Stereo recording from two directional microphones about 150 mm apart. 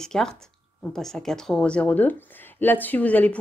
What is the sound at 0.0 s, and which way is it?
Speech, 5° left (ahead or behind).